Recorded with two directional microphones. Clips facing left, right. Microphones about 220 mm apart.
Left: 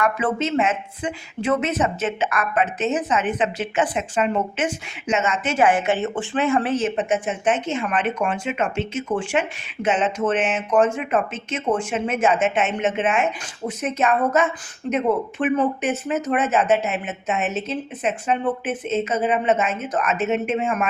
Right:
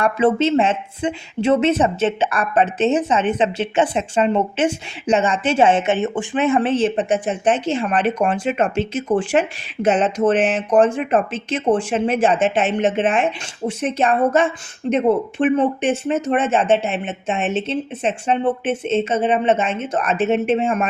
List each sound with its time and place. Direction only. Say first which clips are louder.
0.0 s speech: right 6 dB; 30° right (ahead or behind)